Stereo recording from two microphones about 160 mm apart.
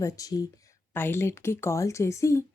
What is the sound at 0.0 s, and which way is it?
A woman's voice, 20° left (ahead or behind).